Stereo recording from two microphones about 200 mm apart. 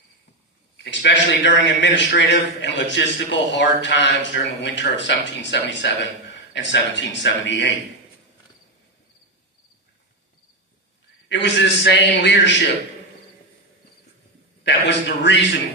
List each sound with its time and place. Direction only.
0.8 s a man's voice: 60° left (ahead or behind)
11.2 s a man's voice: 60° left (ahead or behind)
14.6 s a man's voice: 60° left (ahead or behind)